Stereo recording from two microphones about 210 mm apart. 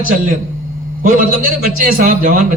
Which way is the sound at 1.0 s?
40° right (ahead or behind).